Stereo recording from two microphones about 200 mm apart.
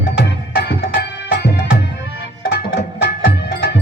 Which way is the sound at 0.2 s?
60° left (ahead or behind).